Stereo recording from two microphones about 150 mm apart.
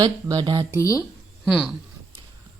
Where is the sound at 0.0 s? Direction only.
25° right (ahead or behind).